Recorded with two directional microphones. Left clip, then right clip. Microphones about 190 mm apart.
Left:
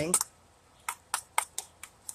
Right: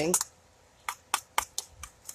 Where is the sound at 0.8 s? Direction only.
5° right (ahead or behind).